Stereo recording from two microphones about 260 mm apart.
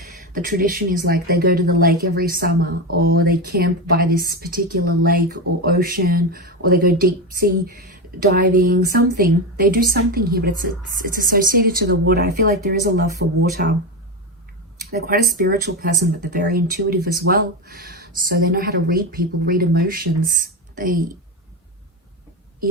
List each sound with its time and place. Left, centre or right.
0.3 s speech: right
14.8 s speech: right